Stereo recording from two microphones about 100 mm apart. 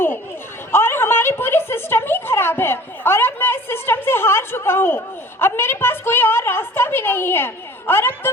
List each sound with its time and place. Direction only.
0.7 s a woman's voice: 25° left (ahead or behind)